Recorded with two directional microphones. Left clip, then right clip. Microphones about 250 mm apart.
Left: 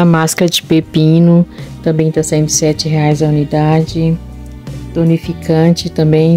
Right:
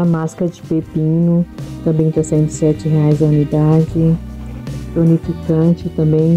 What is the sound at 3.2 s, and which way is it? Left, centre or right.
Speech, centre.